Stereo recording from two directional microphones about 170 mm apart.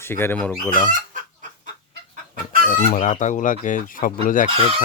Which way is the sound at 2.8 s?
40° left (ahead or behind).